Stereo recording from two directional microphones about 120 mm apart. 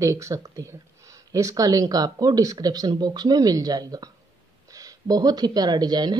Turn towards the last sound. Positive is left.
turn(degrees=-35)  # may be behind; listen again after turning